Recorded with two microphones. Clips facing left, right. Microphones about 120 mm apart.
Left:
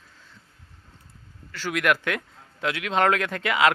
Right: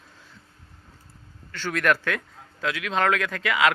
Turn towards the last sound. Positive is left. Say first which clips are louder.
# left 1 dB
turn(degrees=25)  # may be behind; listen again after turning